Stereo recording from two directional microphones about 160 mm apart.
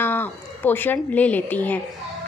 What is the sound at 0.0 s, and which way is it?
A woman's voice, 10° left (ahead or behind).